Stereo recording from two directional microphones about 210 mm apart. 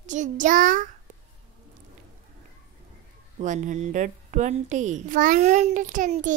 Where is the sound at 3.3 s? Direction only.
35° right (ahead or behind).